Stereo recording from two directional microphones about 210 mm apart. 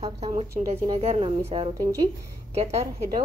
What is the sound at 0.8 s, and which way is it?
Speech, 25° right (ahead or behind).